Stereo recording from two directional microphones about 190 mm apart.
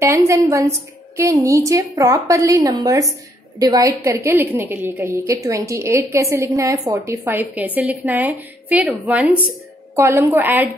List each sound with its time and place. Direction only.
0.0 s a woman's voice: 15° right (ahead or behind)